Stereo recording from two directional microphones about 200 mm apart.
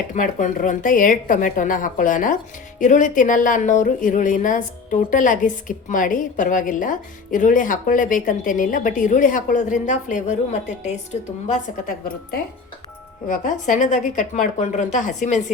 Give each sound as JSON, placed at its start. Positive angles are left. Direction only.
{"t": 0.1, "sound": "speech", "side_deg": 40}
{"t": 11.5, "sound": "a woman's voice", "side_deg": 45}